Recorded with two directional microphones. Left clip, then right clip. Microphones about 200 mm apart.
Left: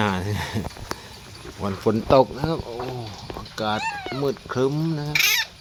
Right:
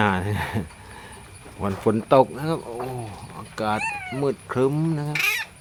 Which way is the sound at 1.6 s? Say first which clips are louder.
Even; centre (ahead or behind).